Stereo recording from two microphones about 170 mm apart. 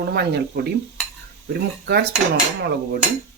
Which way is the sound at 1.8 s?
70° right (ahead or behind).